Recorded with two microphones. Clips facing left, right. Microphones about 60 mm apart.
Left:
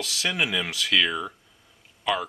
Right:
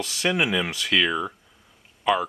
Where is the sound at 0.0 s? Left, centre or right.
Centre.